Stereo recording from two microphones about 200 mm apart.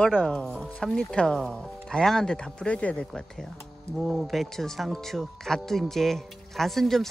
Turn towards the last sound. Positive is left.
turn(degrees=0)  # may be behind; listen again after turning